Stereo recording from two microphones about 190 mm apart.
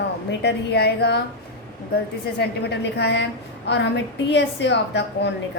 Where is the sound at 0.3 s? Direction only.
60° left (ahead or behind).